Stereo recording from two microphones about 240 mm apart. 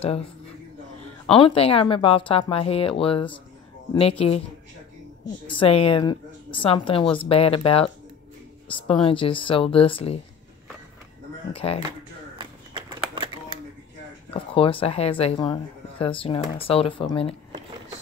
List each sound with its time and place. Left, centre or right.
1.3 s speech: left
5.5 s speech: left
11.5 s speech: left
12.4 s a sound: centre
14.3 s speech: left